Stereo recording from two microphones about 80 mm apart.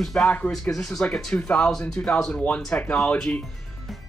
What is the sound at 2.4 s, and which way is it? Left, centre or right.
Speech, centre.